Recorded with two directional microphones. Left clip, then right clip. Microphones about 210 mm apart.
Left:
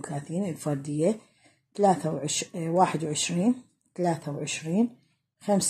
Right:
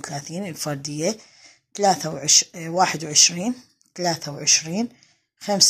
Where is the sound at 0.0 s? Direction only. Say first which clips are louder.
Right 2 dB; 15° right (ahead or behind).